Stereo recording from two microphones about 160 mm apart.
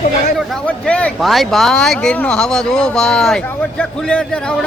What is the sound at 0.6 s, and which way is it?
Speech, 10° left (ahead or behind).